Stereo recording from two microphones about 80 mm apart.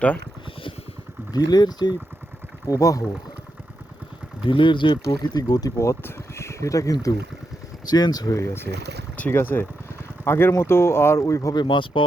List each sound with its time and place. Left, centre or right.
1.3 s speech: left
2.6 s speech: left
4.4 s speech: left
5.7 s speech: left
7.9 s speech: left
8.4 s speech: left
11.5 s speech: left